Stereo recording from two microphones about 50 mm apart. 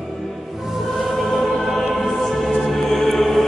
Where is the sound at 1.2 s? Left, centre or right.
Centre.